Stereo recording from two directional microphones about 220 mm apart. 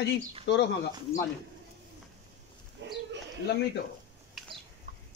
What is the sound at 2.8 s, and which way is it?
Bird, 50° right (ahead or behind).